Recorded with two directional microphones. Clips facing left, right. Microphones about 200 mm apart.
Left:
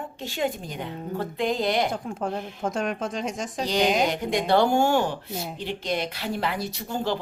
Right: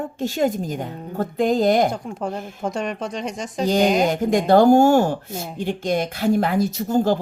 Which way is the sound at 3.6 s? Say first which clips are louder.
Right 5 dB; 45° right (ahead or behind).